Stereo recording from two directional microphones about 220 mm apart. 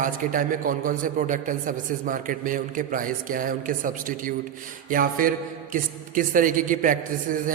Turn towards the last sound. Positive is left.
turn(degrees=-40)  # may be behind; listen again after turning